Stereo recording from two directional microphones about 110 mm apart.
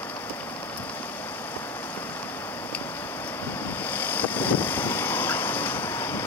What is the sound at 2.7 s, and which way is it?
Wind, 15° left (ahead or behind).